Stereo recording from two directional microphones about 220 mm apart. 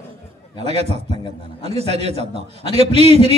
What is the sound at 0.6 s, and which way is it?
A man's voice, 30° right (ahead or behind).